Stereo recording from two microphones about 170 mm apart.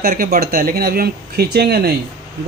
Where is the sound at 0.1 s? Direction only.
60° right (ahead or behind).